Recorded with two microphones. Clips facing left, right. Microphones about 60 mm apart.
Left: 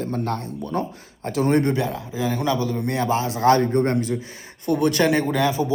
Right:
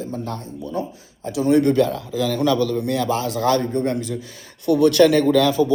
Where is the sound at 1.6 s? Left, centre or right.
Centre; by 4.2 s left.